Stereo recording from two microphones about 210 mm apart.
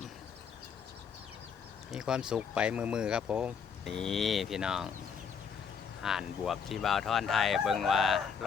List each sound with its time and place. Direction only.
1.9 s speech: 5° right (ahead or behind)
6.0 s speech: centre (ahead or behind)